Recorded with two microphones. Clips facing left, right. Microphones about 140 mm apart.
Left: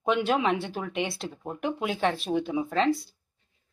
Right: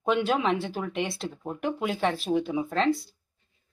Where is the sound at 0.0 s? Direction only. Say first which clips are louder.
Even; centre (ahead or behind).